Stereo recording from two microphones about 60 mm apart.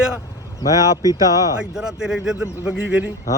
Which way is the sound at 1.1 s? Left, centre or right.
Left.